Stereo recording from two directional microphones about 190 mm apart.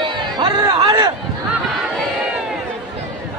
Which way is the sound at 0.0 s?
25° right (ahead or behind).